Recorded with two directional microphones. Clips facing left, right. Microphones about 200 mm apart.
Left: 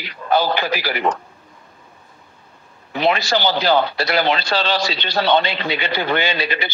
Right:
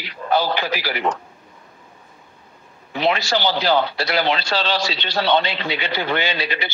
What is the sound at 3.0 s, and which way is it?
A man's voice, 50° left (ahead or behind).